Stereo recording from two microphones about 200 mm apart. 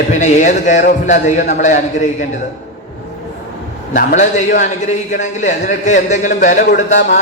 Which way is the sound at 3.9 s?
40° left (ahead or behind).